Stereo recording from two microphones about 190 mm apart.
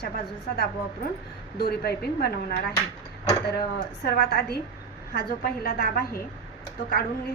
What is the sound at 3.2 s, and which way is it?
Dishes, 15° left (ahead or behind).